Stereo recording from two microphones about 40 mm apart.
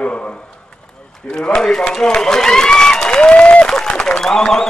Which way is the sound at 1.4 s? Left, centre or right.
Centre.